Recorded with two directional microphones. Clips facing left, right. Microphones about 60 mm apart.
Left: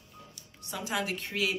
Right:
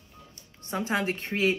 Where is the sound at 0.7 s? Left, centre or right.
Right.